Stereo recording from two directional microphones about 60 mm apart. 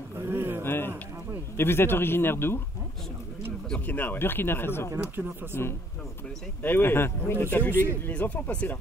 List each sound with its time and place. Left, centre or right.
0.2 s a sound: right
0.7 s a sound: left
1.6 s speech: left
3.8 s speech: left
4.9 s speech: right
5.5 s a man's voice: left
6.6 s speech: left
8.1 s speech: left